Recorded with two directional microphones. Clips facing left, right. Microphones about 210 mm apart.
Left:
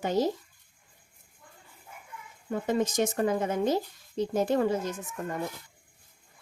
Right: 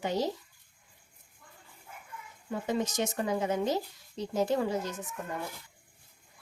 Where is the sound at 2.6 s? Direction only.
50° left (ahead or behind).